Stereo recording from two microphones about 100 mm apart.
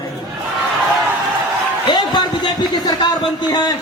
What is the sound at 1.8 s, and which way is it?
Speech, 50° left (ahead or behind).